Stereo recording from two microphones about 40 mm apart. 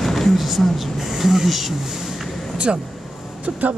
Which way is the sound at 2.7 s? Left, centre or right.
Right.